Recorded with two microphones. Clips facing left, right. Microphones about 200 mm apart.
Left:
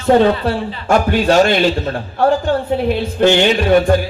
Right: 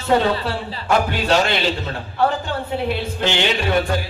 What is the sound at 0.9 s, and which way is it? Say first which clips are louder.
A man's voice: left 5 dB; 45° left (ahead or behind).